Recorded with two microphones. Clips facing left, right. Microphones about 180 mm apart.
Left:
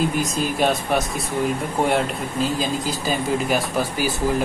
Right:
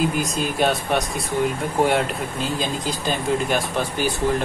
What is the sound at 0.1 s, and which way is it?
Speech, centre (ahead or behind).